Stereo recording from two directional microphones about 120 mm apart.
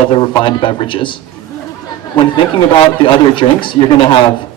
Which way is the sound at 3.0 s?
45° left (ahead or behind).